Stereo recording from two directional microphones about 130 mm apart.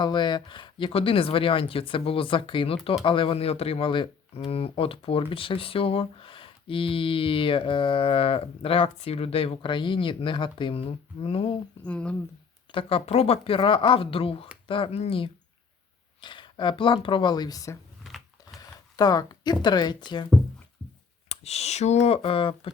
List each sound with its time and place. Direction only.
0.0 s speech: 35° left (ahead or behind)
11.8 s speech: 10° left (ahead or behind)
12.7 s speech: 50° left (ahead or behind)
16.2 s speech: 35° left (ahead or behind)
18.0 s a sound: centre (ahead or behind)
18.9 s speech: 30° left (ahead or behind)
21.2 s speech: 55° left (ahead or behind)